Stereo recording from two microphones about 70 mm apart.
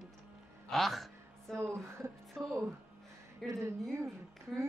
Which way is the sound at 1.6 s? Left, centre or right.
Right.